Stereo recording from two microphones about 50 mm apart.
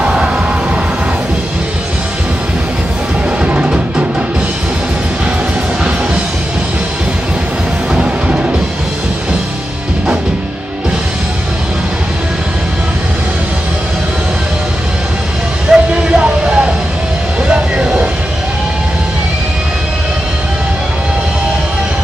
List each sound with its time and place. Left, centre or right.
0.0 s music: right
3.4 s music: right
8.0 s music: right
15.7 s a sound: centre
17.5 s vehicle: right